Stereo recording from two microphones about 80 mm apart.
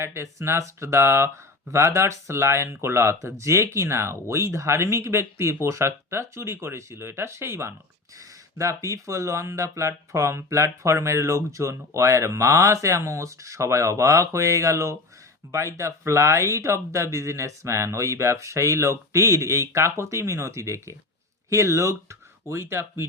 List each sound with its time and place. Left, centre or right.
0.0 s speech: right